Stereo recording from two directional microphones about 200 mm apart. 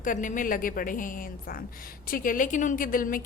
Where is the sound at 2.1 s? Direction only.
45° left (ahead or behind).